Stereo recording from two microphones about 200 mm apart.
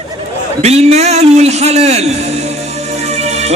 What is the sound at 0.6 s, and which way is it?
A man's voice, 30° right (ahead or behind).